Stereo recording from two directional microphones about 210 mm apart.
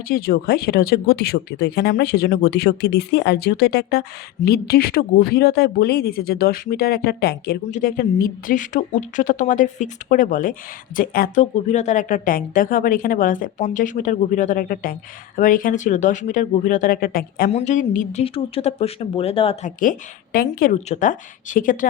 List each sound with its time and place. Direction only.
0.1 s speech: 45° left (ahead or behind)
17.5 s speech: 35° left (ahead or behind)
19.8 s speech: 40° left (ahead or behind)